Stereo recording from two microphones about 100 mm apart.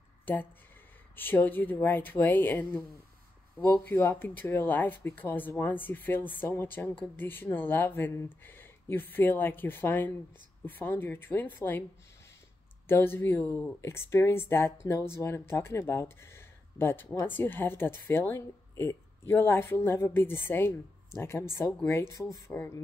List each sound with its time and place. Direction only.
0.2 s a sound: 20° left (ahead or behind)
1.1 s speech: 20° left (ahead or behind)
12.8 s speech: 25° left (ahead or behind)
22.5 s speech: 20° left (ahead or behind)